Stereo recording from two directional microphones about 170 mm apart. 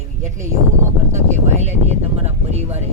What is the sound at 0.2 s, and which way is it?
Speech, 45° right (ahead or behind).